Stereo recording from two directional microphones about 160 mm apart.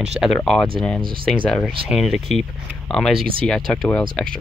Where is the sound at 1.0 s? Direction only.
30° right (ahead or behind).